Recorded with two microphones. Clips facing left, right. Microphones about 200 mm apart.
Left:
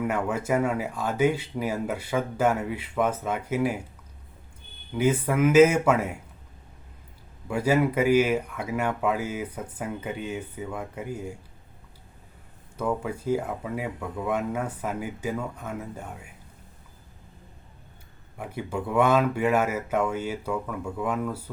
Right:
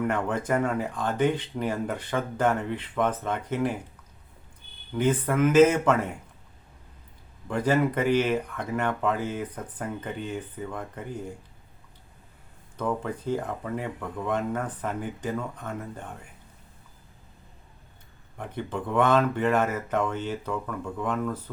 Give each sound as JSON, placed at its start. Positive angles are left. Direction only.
{"t": 0.0, "sound": "speech", "side_deg": 10}
{"t": 4.9, "sound": "speech", "side_deg": 10}
{"t": 7.4, "sound": "speech", "side_deg": 10}
{"t": 12.7, "sound": "speech", "side_deg": 10}
{"t": 18.3, "sound": "speech", "side_deg": 10}